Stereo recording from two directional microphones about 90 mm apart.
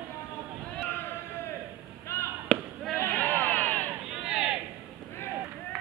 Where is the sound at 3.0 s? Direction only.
20° left (ahead or behind).